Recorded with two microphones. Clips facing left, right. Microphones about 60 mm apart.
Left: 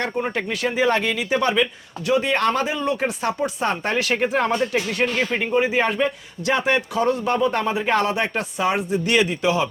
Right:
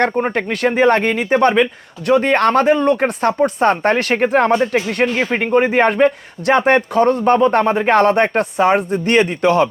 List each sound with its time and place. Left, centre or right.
0.0 s a man's voice: right
5.0 s speech: right
5.4 s a man's voice: right